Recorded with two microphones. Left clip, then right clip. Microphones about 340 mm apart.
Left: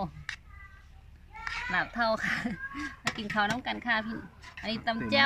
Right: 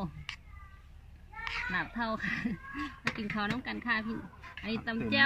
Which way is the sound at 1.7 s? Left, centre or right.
Centre.